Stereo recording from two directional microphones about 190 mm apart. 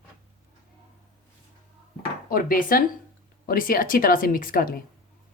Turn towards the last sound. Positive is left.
turn(degrees=50)  # may be behind; listen again after turning